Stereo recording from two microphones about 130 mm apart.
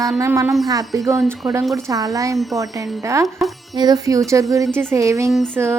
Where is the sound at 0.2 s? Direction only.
20° right (ahead or behind).